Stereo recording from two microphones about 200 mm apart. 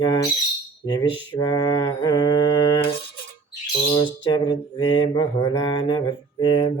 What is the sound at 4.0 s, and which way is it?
Mantra, 20° left (ahead or behind).